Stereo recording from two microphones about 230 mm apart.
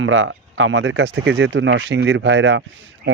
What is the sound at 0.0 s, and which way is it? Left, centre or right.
Speech, right.